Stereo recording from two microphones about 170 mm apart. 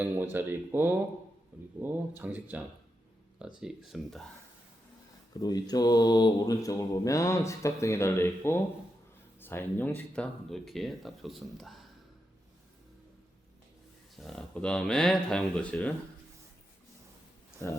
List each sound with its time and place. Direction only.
0.0 s speech: 10° right (ahead or behind)
5.3 s speech: 25° left (ahead or behind); by 11.8 s centre (ahead or behind)
14.2 s speech: 5° left (ahead or behind)